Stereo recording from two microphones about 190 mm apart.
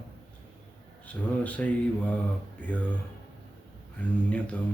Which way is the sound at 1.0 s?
5° left (ahead or behind).